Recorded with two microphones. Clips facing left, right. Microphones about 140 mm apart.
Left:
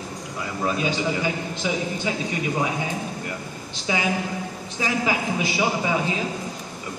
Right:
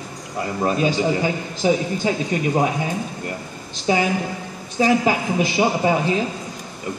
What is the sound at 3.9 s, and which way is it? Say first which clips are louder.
Speech: right 5 dB; 35° right (ahead or behind).